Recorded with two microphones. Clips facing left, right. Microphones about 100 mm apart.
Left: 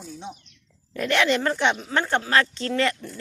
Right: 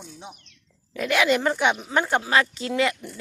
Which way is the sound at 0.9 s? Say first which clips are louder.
Even; 5° right (ahead or behind).